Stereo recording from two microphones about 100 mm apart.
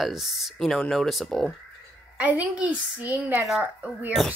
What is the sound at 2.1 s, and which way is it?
A woman's voice, 15° right (ahead or behind).